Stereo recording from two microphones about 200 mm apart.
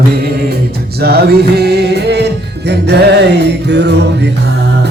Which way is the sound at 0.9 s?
50° right (ahead or behind).